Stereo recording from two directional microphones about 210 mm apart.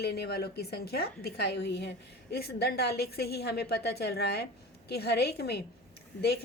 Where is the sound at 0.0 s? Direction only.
50° left (ahead or behind).